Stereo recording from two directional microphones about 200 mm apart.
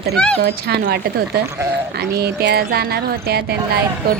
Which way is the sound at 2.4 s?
55° right (ahead or behind).